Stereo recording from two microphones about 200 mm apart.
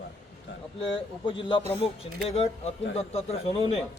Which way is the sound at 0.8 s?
25° left (ahead or behind).